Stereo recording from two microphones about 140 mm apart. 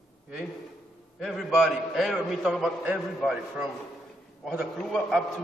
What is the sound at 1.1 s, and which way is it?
A man's voice, centre (ahead or behind).